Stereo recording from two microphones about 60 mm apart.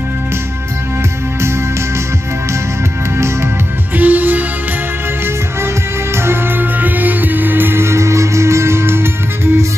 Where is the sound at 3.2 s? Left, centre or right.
Right.